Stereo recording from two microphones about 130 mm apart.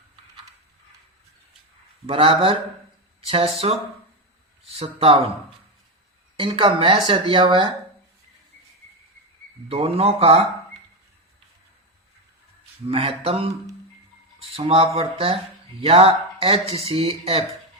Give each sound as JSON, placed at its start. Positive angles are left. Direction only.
{"t": 2.0, "sound": "speech", "side_deg": -45}
{"t": 6.3, "sound": "speech", "side_deg": -40}
{"t": 9.6, "sound": "speech", "side_deg": -50}
{"t": 12.9, "sound": "speech", "side_deg": -45}